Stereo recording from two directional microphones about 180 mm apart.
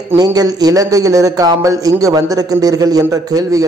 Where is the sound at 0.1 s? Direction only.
20° right (ahead or behind).